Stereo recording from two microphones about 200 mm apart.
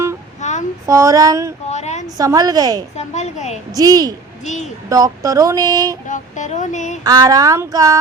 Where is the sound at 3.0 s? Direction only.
35° left (ahead or behind).